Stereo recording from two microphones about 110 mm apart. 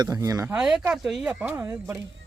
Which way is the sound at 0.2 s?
30° right (ahead or behind).